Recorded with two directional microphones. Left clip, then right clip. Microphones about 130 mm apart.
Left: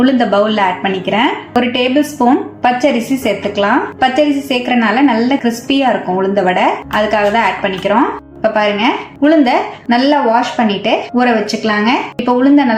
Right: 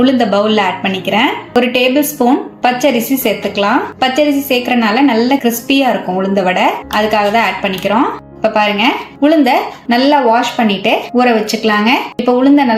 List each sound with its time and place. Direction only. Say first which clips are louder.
0.0 s a woman's voice: even; 20° right (ahead or behind)